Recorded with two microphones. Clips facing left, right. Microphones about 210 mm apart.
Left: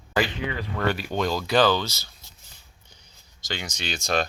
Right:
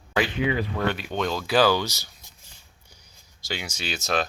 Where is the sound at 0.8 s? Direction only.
5° left (ahead or behind).